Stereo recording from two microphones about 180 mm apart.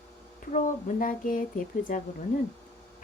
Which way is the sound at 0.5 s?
50° left (ahead or behind).